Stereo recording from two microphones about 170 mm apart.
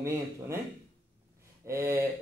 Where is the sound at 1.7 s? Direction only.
15° right (ahead or behind).